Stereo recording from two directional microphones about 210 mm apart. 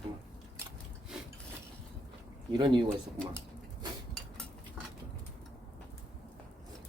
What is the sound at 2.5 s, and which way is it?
Speech, 20° right (ahead or behind).